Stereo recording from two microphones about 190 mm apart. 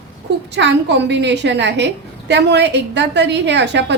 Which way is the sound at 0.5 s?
65° right (ahead or behind).